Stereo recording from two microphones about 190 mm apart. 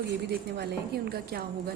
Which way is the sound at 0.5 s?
60° right (ahead or behind).